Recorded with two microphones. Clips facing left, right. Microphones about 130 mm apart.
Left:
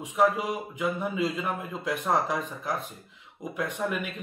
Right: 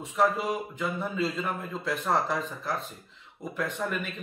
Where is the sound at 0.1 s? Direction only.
10° left (ahead or behind).